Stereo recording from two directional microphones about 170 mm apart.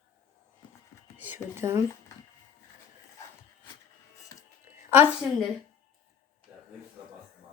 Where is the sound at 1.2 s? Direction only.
15° right (ahead or behind).